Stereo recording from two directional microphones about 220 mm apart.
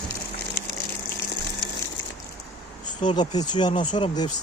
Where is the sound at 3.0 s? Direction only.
25° left (ahead or behind).